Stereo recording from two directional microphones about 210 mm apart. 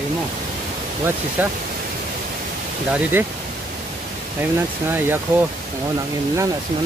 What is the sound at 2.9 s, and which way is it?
Speech, 10° right (ahead or behind).